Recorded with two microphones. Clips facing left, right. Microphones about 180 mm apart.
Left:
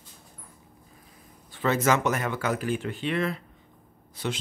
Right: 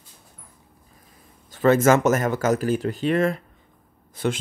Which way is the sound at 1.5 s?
45° right (ahead or behind).